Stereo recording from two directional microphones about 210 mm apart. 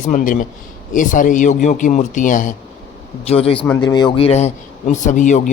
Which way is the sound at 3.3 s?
25° left (ahead or behind).